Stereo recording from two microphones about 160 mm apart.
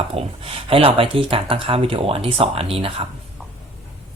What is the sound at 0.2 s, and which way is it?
Speech, 35° right (ahead or behind).